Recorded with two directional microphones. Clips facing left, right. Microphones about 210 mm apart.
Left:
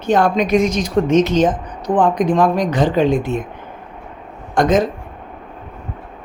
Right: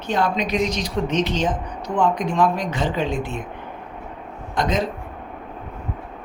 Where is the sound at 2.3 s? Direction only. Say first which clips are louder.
Left 5 dB; 40° left (ahead or behind).